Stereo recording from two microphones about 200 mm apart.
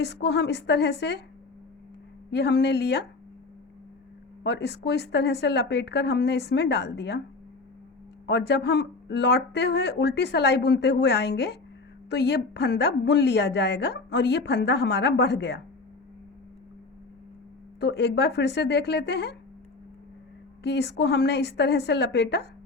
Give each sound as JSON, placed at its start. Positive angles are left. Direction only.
{"t": 0.0, "sound": "a woman's voice", "side_deg": 55}
{"t": 2.3, "sound": "a woman's voice", "side_deg": 55}
{"t": 4.4, "sound": "a woman's voice", "side_deg": 55}
{"t": 8.3, "sound": "a woman's voice", "side_deg": 55}
{"t": 17.7, "sound": "a woman's voice", "side_deg": 55}
{"t": 20.7, "sound": "a woman's voice", "side_deg": 55}